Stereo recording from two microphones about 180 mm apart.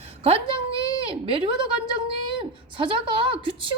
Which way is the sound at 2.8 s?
30° right (ahead or behind).